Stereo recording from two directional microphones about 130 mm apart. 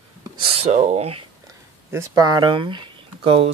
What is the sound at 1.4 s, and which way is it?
Speech, 25° right (ahead or behind).